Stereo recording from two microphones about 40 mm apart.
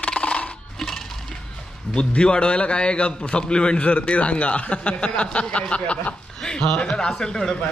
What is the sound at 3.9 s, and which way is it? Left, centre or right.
Speech, left.